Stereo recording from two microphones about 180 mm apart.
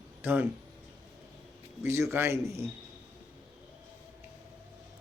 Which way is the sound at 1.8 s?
15° right (ahead or behind).